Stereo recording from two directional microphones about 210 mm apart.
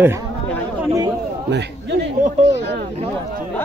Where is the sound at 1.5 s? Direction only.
55° right (ahead or behind).